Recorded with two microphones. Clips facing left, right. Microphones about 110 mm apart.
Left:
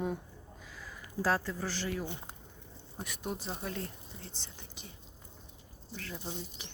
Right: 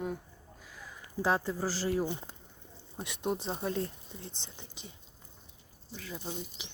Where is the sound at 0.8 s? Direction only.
20° right (ahead or behind).